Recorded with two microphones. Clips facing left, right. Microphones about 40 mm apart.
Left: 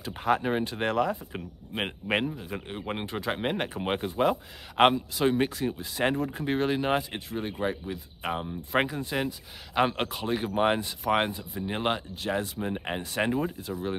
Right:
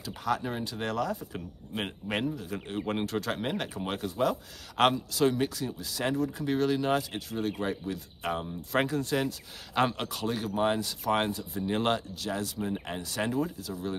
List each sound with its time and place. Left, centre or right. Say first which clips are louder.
0.0 s speech: left 4 dB; left; by 12.0 s centre
12.2 s speech: left 3 dB; left